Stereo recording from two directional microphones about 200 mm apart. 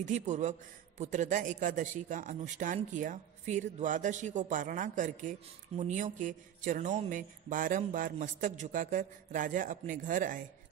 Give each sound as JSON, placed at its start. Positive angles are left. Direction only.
{"t": 0.0, "sound": "a man's voice", "side_deg": -35}